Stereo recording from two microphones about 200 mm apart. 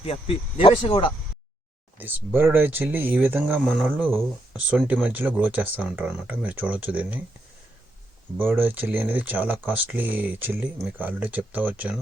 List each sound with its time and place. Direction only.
0.0 s speech: 30° left (ahead or behind)
2.0 s speech: 10° right (ahead or behind)
8.4 s speech: 10° right (ahead or behind)